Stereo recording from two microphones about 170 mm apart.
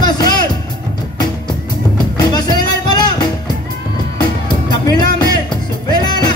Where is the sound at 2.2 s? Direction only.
25° left (ahead or behind).